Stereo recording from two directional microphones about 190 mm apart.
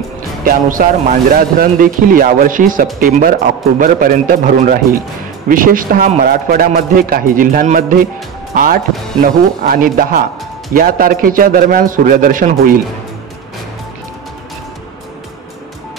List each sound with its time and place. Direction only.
0.4 s speech: 45° right (ahead or behind)